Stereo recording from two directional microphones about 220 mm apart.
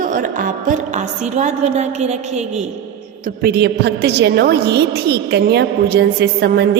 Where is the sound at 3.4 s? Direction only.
50° right (ahead or behind).